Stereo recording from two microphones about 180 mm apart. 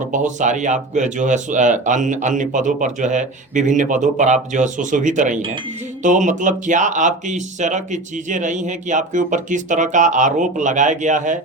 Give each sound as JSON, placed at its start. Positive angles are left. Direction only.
{"t": 0.1, "sound": "speech", "side_deg": -45}